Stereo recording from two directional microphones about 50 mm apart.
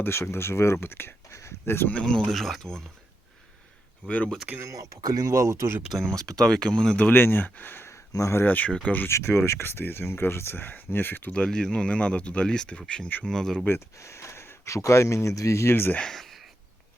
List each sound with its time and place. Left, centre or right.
0.0 s speech: left
1.3 s a sound: left
1.6 s speech: left
2.0 s speech: centre
4.6 s speech: right
6.0 s speech: centre
7.1 s speech: left
7.9 s a sound: left
8.4 s speech: left
9.0 s speech: left
11.3 s speech: centre
14.0 s speech: left
15.7 s speech: left
16.0 s a sound: centre